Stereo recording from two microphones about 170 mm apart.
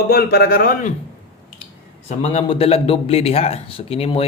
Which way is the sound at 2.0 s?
40° left (ahead or behind).